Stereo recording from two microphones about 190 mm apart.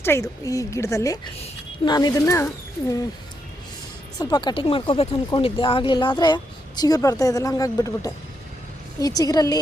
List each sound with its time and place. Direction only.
0.0 s a woman's voice: 15° left (ahead or behind)
4.2 s speech: 20° left (ahead or behind)